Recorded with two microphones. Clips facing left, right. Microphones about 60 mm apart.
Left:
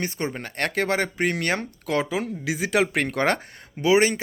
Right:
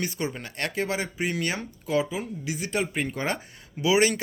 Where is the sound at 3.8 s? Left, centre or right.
Left.